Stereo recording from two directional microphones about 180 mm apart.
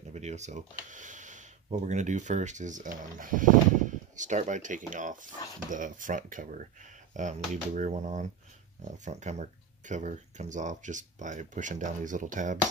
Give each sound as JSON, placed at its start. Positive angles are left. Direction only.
{"t": 0.1, "sound": "speech", "side_deg": -40}